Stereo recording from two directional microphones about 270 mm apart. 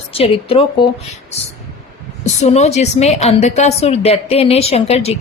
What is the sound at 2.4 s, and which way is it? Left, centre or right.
A woman's voice, left.